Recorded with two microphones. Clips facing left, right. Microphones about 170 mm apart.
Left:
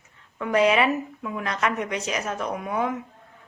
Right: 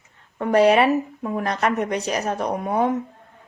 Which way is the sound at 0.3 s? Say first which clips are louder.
Right 4 dB; 40° right (ahead or behind).